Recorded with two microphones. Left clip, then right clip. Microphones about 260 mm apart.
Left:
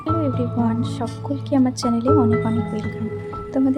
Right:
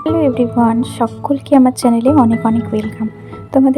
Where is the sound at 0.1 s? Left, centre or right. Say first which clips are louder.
Right 8 dB; right.